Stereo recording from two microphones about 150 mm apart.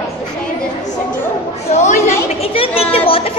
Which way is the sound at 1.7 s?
50° left (ahead or behind).